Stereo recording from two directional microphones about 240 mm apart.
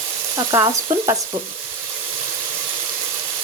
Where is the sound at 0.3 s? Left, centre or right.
Centre.